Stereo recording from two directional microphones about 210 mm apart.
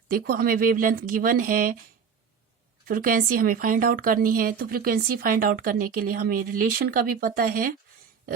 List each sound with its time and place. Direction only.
0.1 s speech: 45° right (ahead or behind)
2.8 s a woman's voice: 40° right (ahead or behind)